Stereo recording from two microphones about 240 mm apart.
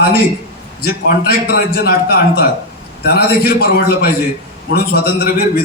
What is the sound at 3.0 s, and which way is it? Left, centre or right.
A man's voice, left.